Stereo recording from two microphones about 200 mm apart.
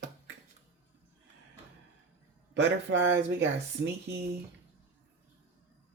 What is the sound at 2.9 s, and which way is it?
Speech, 65° right (ahead or behind).